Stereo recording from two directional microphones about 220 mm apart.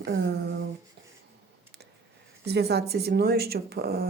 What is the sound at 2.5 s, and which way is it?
Speech, 50° right (ahead or behind).